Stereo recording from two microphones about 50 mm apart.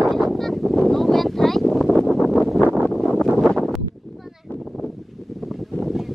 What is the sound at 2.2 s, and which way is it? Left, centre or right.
Wind noise, centre.